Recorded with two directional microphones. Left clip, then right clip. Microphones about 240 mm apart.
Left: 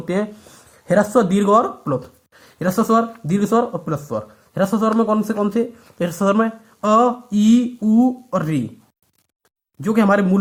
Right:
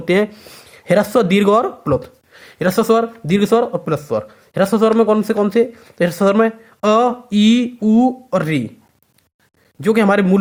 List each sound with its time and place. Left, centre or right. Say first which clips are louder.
0.0 s speech: right 7 dB; right
1.6 s speech: right 4 dB; right
7.9 s speech: right 3 dB; right
8.3 s speech: right 4 dB; right
9.8 s speech: right 3 dB; right